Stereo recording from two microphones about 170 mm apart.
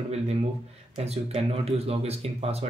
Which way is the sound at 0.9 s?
40° right (ahead or behind).